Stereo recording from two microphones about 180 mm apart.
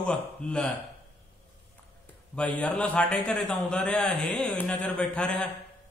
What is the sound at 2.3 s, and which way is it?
Speech, 10° left (ahead or behind).